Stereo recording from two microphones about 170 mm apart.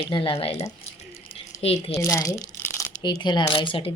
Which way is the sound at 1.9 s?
15° left (ahead or behind).